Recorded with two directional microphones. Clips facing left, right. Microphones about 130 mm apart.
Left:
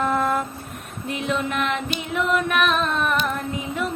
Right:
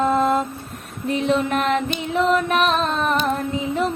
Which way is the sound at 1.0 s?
35° right (ahead or behind).